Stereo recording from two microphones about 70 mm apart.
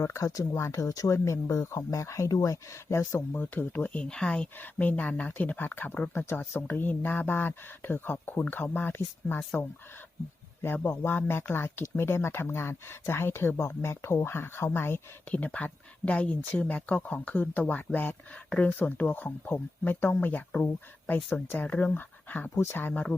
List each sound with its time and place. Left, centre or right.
0.0 s speech: left
3.3 s speech: left
10.9 s speech: left
15.3 s speech: centre